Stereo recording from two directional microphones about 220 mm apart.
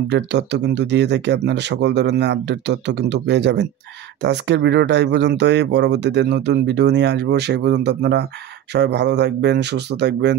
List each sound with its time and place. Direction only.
0.1 s speech: 50° right (ahead or behind)